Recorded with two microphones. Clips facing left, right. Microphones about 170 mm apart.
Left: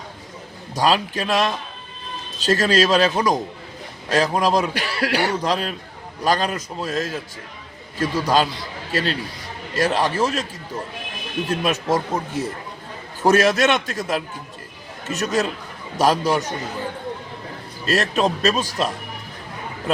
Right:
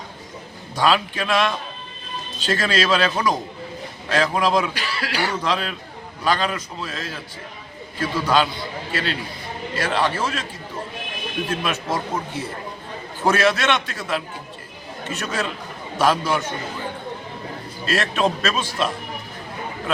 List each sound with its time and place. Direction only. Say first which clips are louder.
0.8 s speech: even; 40° left (ahead or behind)
4.7 s speech: left 5 dB; 55° left (ahead or behind)
5.3 s a man's voice: left 2 dB; 40° left (ahead or behind)
11.6 s speech: left 4 dB; 40° left (ahead or behind)
13.2 s speech: left 3 dB; 40° left (ahead or behind)
17.8 s speech: left 1 dB; 40° left (ahead or behind)